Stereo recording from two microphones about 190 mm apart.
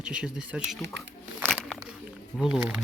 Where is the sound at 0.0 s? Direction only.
5° right (ahead or behind).